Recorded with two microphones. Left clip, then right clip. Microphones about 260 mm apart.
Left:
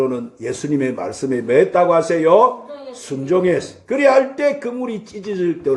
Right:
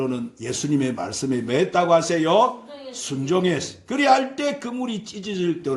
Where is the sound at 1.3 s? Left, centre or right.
Right.